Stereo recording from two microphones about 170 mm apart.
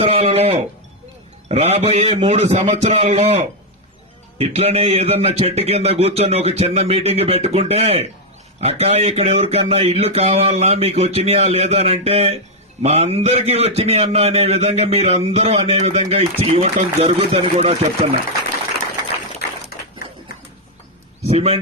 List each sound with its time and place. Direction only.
0.0 s speech: 35° right (ahead or behind)
19.7 s a sound: 65° left (ahead or behind)
21.2 s speech: 35° right (ahead or behind)